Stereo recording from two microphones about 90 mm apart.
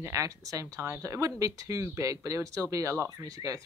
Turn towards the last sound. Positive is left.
turn(degrees=-40)  # may be behind; listen again after turning